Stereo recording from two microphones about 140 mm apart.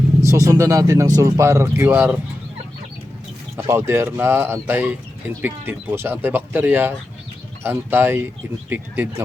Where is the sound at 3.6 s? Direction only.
20° right (ahead or behind).